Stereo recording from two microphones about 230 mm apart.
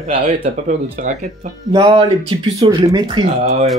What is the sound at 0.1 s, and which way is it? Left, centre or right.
Speech, right.